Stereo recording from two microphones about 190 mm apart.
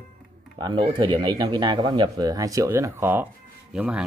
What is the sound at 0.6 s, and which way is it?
Speech, 25° right (ahead or behind).